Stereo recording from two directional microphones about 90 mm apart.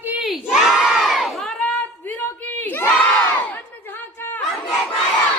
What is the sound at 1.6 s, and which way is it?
Crowd, 20° left (ahead or behind).